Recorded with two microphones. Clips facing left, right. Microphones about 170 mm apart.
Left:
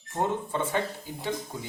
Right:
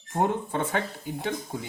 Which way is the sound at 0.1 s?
55° right (ahead or behind).